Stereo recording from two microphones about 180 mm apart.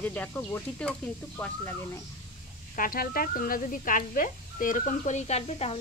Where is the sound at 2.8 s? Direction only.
50° left (ahead or behind).